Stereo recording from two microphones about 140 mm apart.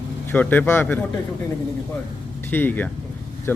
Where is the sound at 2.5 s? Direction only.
15° left (ahead or behind).